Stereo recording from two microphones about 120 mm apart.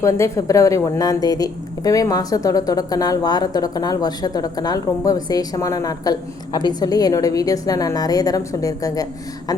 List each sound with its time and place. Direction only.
0.0 s a woman's voice: 25° left (ahead or behind)